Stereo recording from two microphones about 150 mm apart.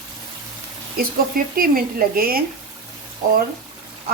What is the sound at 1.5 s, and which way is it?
Speech, 75° right (ahead or behind).